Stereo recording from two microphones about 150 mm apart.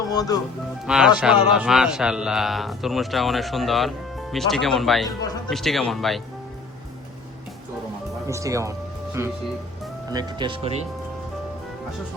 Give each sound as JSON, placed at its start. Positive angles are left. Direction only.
{"t": 0.1, "sound": "speech", "side_deg": 25}
{"t": 0.9, "sound": "a man's voice", "side_deg": -5}
{"t": 5.0, "sound": "speech", "side_deg": 25}
{"t": 5.5, "sound": "a man's voice", "side_deg": 0}
{"t": 8.3, "sound": "speech", "side_deg": -20}